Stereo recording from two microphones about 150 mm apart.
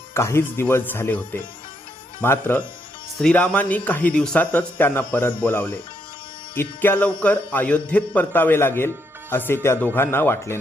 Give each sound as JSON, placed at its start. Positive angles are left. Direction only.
{"t": 0.1, "sound": "speech", "side_deg": 20}